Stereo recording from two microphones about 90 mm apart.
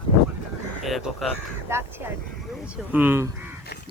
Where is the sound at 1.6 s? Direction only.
30° right (ahead or behind).